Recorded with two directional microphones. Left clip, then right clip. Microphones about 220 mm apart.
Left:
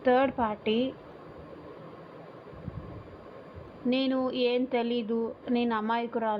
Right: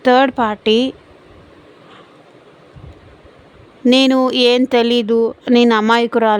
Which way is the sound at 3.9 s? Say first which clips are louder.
Right 16 dB; 70° right (ahead or behind).